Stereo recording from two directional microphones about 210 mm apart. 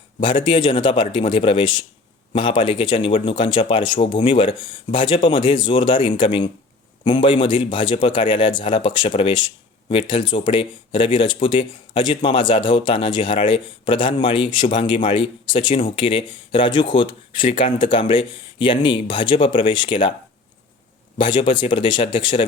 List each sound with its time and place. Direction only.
0.2 s speech: 25° left (ahead or behind)
21.2 s speech: 25° left (ahead or behind)